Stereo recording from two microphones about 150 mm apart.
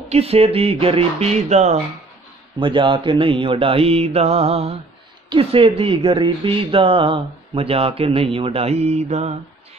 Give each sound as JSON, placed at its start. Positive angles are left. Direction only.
{"t": 0.1, "sound": "speech", "side_deg": -40}
{"t": 2.6, "sound": "speech", "side_deg": -35}